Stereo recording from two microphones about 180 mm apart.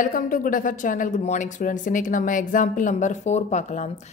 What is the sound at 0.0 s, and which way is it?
A woman's voice, 50° left (ahead or behind).